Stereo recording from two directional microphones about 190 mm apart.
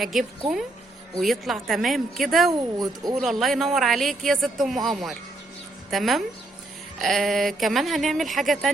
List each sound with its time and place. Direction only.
0.0 s speech: centre (ahead or behind)
2.5 s speech: 20° right (ahead or behind)
3.2 s speech: centre (ahead or behind)